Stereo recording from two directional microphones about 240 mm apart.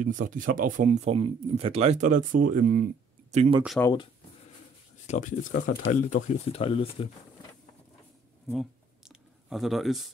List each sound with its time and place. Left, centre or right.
0.0 s speech: right
3.8 s speech: centre
5.0 s speech: left
8.5 s a sound: centre